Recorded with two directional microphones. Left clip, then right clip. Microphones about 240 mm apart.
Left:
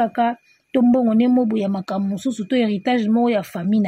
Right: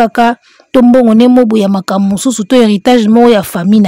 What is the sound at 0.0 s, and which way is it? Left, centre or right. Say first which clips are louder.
Speech: right 10 dB; right.